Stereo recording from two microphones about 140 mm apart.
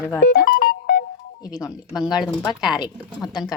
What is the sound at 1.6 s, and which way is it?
A woman's voice, 25° left (ahead or behind).